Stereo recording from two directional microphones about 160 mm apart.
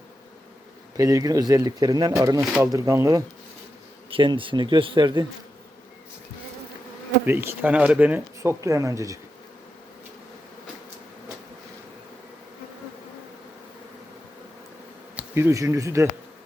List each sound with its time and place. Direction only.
0.9 s speech: 20° right (ahead or behind)
4.1 s speech: 30° right (ahead or behind)
7.3 s speech: 10° right (ahead or behind)
15.1 s speech: 15° right (ahead or behind)